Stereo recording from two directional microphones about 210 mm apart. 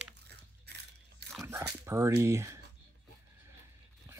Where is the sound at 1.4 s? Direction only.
15° right (ahead or behind).